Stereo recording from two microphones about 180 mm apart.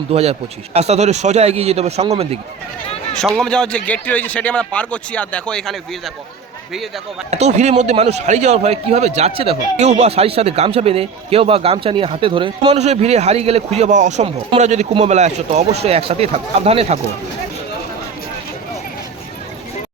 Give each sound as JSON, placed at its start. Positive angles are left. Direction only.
{"t": 0.1, "sound": "a man's voice", "side_deg": -35}
{"t": 3.2, "sound": "a man's voice", "side_deg": 0}
{"t": 7.3, "sound": "a man's voice", "side_deg": -40}